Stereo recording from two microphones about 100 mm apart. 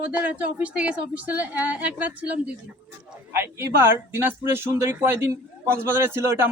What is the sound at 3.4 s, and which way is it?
Speech, 25° right (ahead or behind).